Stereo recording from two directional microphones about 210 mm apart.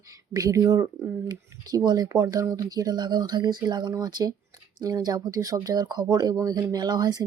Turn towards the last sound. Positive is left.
turn(degrees=-20)  # may be behind; listen again after turning